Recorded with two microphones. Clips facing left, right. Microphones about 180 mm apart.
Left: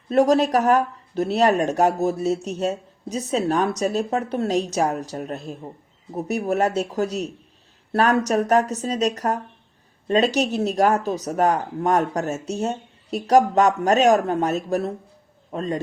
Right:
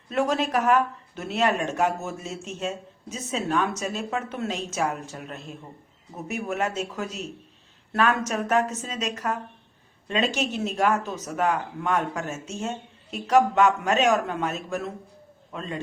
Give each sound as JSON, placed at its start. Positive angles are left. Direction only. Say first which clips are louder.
{"t": 0.1, "sound": "speech", "louder": "left 7 dB", "side_deg": 40}